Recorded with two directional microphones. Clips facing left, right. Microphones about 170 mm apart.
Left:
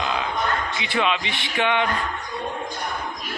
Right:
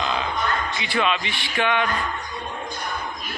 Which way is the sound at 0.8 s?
20° left (ahead or behind).